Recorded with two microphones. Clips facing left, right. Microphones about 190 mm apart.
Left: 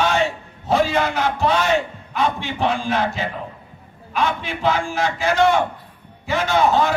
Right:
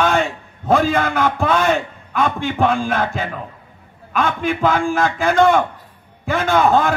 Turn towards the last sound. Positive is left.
turn(degrees=-55)  # may be behind; listen again after turning